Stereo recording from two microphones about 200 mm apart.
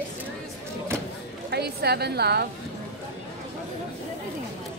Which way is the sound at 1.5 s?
55° right (ahead or behind).